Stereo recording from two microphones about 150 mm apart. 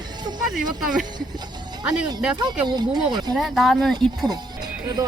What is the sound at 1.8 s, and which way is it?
Speech, 25° right (ahead or behind).